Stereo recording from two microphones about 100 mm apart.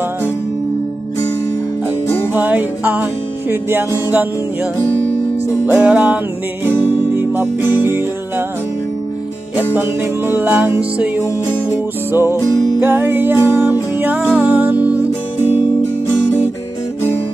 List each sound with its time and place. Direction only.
2.3 s music: 15° right (ahead or behind)
5.7 s music: 15° right (ahead or behind)
9.8 s music: 20° right (ahead or behind)